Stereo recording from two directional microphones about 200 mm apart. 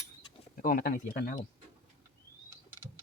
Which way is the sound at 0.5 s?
45° left (ahead or behind).